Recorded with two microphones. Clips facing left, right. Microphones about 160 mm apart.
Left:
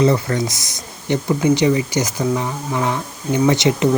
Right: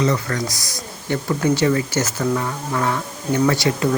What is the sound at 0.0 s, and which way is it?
Speech, 25° left (ahead or behind).